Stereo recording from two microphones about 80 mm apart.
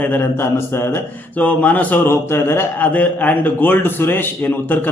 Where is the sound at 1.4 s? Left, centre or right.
Centre.